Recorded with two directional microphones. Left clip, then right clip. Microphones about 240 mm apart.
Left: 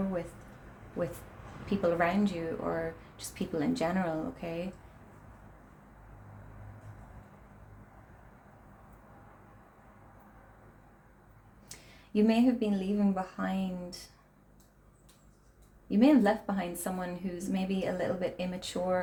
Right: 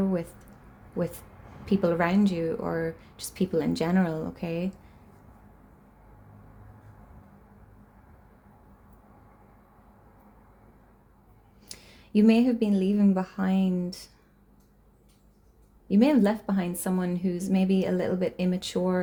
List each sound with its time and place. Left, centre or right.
1.6 s a woman's voice: right
11.7 s speech: right
15.9 s a woman's voice: right